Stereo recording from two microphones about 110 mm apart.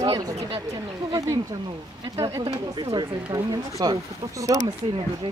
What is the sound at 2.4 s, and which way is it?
Speech, 40° right (ahead or behind).